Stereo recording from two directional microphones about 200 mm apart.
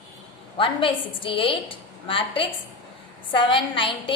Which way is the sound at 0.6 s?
25° left (ahead or behind).